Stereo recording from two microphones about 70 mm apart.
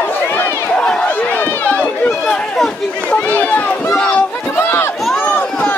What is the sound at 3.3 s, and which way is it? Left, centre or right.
Run, left.